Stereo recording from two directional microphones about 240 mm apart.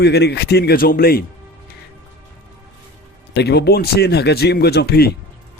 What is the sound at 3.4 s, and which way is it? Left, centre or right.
Speech, left.